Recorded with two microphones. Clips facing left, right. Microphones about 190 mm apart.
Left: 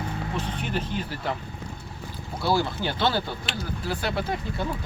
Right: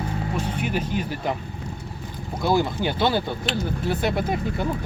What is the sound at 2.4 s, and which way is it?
Speech, 15° right (ahead or behind).